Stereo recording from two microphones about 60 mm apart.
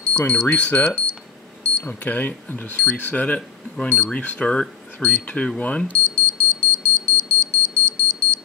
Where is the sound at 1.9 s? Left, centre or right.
Left.